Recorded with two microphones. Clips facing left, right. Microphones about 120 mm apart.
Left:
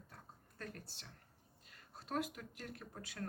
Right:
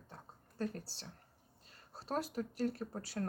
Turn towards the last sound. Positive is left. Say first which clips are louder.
# right 8 dB
turn(degrees=-35)  # may be behind; listen again after turning